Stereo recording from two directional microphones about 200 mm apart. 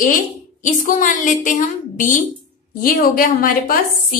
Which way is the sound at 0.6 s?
40° left (ahead or behind).